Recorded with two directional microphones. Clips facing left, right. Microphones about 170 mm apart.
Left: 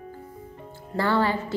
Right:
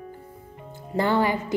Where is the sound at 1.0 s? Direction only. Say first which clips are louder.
Right 1 dB; 15° right (ahead or behind).